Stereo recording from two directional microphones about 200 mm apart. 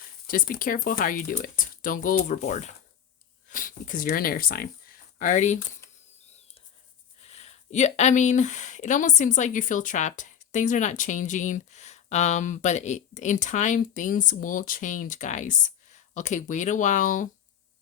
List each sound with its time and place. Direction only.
0.3 s speech: 45° left (ahead or behind)
7.2 s speech: 30° left (ahead or behind)